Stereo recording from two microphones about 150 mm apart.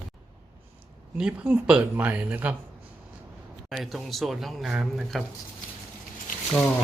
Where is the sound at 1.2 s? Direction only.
5° right (ahead or behind).